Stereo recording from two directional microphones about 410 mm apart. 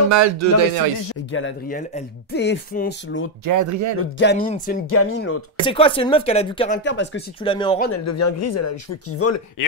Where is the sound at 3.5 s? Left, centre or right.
Right.